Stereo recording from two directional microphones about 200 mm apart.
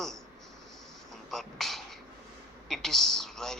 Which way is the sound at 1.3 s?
Centre (ahead or behind).